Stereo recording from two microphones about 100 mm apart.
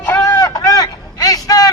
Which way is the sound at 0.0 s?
25° left (ahead or behind).